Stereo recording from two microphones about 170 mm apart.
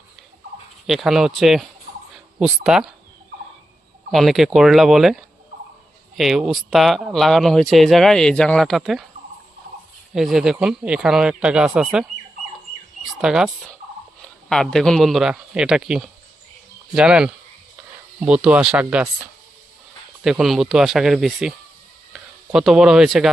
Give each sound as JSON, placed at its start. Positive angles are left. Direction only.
{"t": 0.9, "sound": "speech", "side_deg": 0}
{"t": 4.1, "sound": "speech", "side_deg": 0}
{"t": 10.2, "sound": "speech", "side_deg": -5}
{"t": 13.2, "sound": "speech", "side_deg": -5}
{"t": 20.2, "sound": "speech", "side_deg": 0}